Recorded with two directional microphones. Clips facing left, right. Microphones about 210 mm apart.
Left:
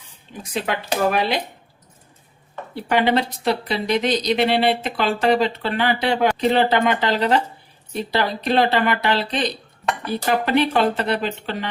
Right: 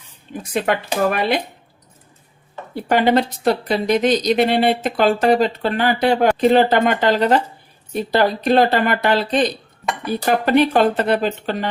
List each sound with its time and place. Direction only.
0.5 s speech: 50° right (ahead or behind)
2.7 s speech: 45° right (ahead or behind)